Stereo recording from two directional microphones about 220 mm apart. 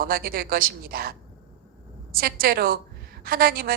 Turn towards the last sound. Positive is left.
turn(degrees=-40)  # may be behind; listen again after turning